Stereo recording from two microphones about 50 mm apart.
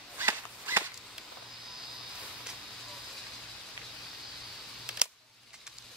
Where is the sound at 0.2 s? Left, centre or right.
Right.